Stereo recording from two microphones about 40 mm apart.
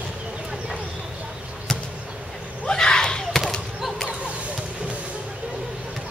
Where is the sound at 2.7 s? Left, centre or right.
Centre.